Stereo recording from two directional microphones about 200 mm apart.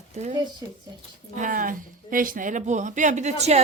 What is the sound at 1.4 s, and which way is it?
Speech, 40° right (ahead or behind).